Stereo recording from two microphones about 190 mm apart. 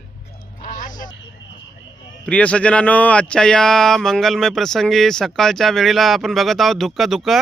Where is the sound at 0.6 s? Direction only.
45° left (ahead or behind).